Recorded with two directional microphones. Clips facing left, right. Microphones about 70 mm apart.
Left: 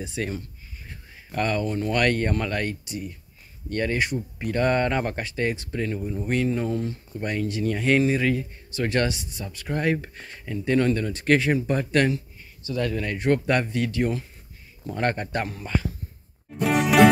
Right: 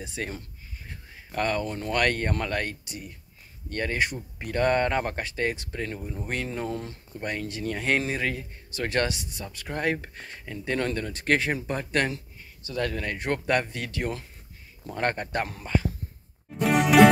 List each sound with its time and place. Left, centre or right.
0.0 s speech: right
7.2 s speech: right
9.8 s speech: right
11.6 s speech: right
12.6 s speech: right
14.9 s speech: right
16.5 s music: centre